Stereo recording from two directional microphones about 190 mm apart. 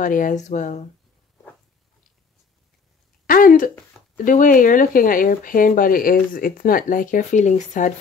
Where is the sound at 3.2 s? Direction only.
45° left (ahead or behind).